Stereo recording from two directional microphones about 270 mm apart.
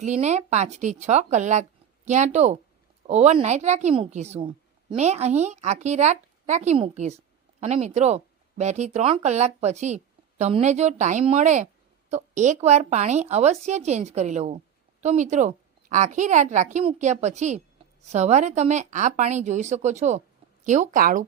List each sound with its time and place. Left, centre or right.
0.0 s speech: right